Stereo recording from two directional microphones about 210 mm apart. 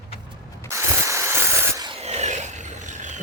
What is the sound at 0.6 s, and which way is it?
Rub, 15° right (ahead or behind).